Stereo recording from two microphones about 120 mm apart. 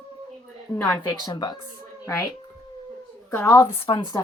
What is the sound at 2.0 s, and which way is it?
Speech, 25° left (ahead or behind).